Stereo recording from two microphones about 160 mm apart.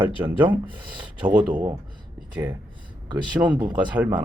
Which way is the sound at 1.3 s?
10° right (ahead or behind).